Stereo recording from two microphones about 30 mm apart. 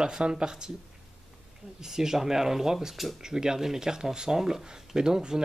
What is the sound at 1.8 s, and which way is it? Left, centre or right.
Speech, centre.